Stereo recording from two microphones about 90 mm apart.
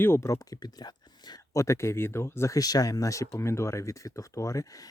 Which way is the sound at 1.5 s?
35° left (ahead or behind).